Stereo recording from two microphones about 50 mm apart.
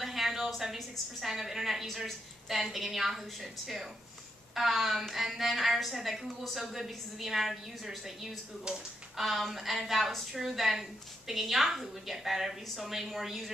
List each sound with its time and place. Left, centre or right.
0.0 s a sound: centre
0.7 s a woman's voice: centre
4.6 s a woman's voice: centre
8.7 s speech: centre
9.1 s a woman's voice: centre